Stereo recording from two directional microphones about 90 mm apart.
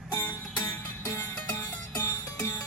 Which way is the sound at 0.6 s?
35° left (ahead or behind).